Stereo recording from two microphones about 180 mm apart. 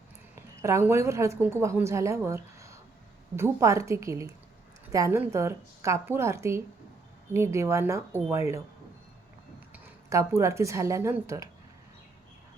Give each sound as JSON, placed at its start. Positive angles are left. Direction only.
{"t": 0.6, "sound": "a woman's voice", "side_deg": -15}
{"t": 9.7, "sound": "a woman's voice", "side_deg": -15}